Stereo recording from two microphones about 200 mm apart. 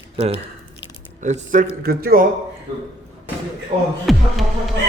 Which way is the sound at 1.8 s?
50° right (ahead or behind).